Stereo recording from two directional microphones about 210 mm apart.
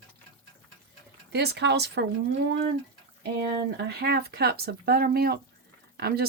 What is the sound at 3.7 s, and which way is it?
Speech, 50° right (ahead or behind).